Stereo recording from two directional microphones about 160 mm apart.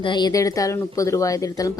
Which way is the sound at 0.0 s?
30° left (ahead or behind).